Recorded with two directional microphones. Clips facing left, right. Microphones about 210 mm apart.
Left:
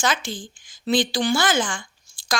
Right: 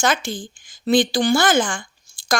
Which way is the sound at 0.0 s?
50° right (ahead or behind).